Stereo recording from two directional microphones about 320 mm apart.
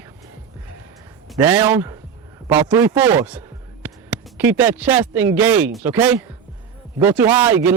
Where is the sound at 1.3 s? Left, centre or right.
Centre.